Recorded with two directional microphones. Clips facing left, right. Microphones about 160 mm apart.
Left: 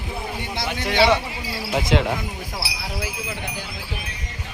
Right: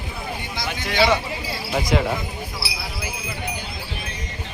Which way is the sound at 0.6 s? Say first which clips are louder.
Left 2 dB; 65° left (ahead or behind).